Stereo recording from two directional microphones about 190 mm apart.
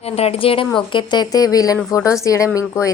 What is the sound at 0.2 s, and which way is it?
Speech, 30° left (ahead or behind).